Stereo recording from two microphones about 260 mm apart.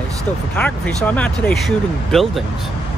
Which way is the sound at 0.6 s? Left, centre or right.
Centre.